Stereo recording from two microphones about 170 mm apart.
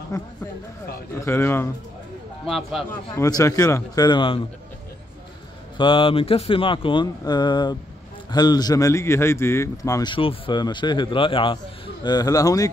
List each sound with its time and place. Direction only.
0.1 s a man's voice: 20° left (ahead or behind)
2.4 s a man's voice: centre (ahead or behind)
2.9 s a man's voice: 20° left (ahead or behind)
5.8 s a man's voice: 30° left (ahead or behind)
10.1 s a man's voice: 30° left (ahead or behind)